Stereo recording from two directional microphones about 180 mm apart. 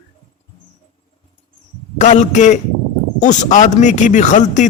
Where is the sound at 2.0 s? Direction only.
40° left (ahead or behind).